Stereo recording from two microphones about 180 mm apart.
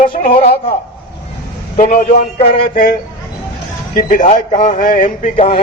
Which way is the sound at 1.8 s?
50° left (ahead or behind).